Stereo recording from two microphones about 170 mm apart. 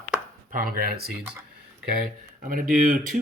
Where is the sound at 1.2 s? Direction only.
10° right (ahead or behind).